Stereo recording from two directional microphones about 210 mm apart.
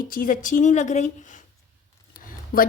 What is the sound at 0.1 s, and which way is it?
Speech, 40° left (ahead or behind).